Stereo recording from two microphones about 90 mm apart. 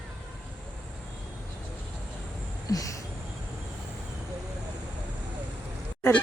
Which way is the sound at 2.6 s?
40° left (ahead or behind).